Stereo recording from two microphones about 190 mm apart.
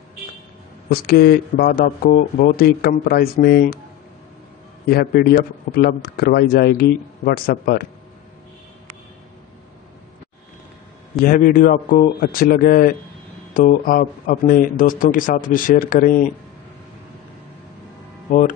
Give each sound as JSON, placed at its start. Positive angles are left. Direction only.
{"t": 0.8, "sound": "speech", "side_deg": 55}
{"t": 4.8, "sound": "speech", "side_deg": 55}
{"t": 11.2, "sound": "speech", "side_deg": 45}
{"t": 18.3, "sound": "speech", "side_deg": 40}